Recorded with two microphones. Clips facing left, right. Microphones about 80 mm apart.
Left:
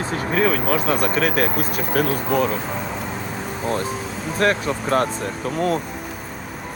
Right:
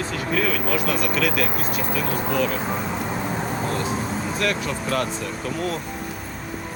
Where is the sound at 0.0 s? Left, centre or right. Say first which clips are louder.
Left 3 dB; left.